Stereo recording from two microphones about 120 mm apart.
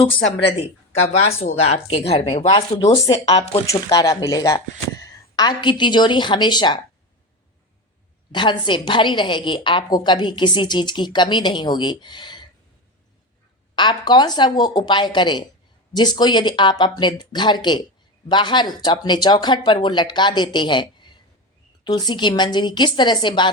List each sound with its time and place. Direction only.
0.0 s speech: 50° left (ahead or behind)
3.7 s a woman's voice: 30° left (ahead or behind)
8.3 s a woman's voice: 40° left (ahead or behind)
13.7 s a woman's voice: 40° left (ahead or behind)